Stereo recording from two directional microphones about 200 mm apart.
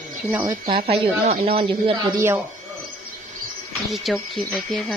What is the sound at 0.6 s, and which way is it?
Speech, 30° right (ahead or behind).